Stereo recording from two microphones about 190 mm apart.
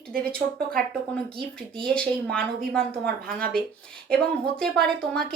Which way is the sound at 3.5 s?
5° left (ahead or behind).